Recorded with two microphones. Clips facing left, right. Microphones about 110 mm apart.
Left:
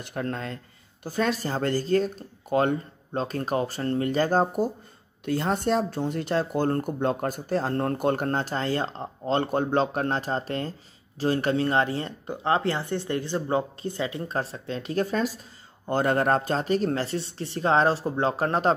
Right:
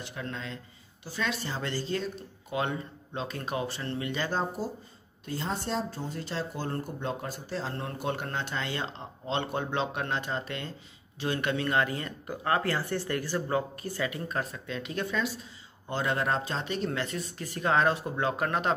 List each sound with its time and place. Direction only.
0.0 s speech: 50° left (ahead or behind)
5.2 s speech: 65° left (ahead or behind); by 18.8 s 35° left (ahead or behind)